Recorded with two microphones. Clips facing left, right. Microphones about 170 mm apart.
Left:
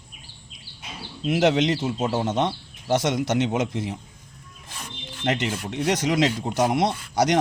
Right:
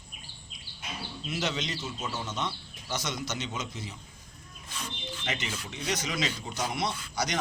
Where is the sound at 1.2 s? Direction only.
90° left.